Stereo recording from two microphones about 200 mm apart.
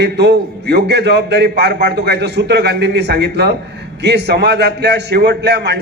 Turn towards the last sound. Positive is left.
turn(degrees=-55)  # may be behind; listen again after turning